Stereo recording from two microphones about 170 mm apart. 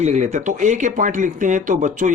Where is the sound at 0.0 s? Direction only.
45° right (ahead or behind).